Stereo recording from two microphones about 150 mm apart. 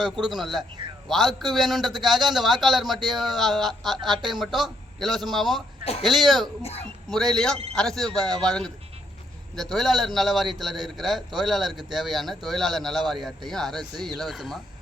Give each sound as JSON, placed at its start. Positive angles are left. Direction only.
{"t": 0.0, "sound": "a man's voice", "side_deg": 0}
{"t": 6.6, "sound": "speech", "side_deg": 45}
{"t": 7.1, "sound": "a man's voice", "side_deg": 5}